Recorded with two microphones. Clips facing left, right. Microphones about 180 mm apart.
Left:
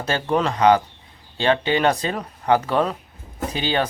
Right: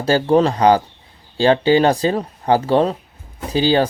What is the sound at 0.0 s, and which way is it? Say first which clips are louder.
Speech: right 7 dB; 30° right (ahead or behind).